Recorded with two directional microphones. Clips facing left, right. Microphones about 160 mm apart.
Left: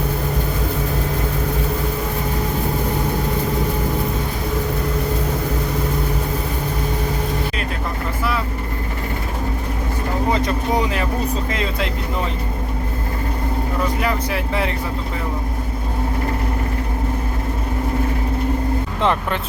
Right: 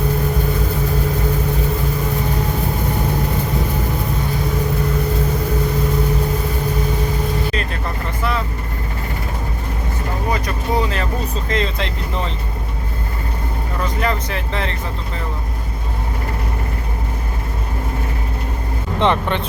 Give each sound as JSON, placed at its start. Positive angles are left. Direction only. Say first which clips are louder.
{"t": 10.3, "sound": "a sound", "louder": "left 1 dB", "side_deg": 20}
{"t": 11.4, "sound": "speech", "louder": "right 1 dB", "side_deg": 5}
{"t": 14.0, "sound": "speech", "louder": "even", "side_deg": 10}
{"t": 18.9, "sound": "speech", "louder": "right 4 dB", "side_deg": 5}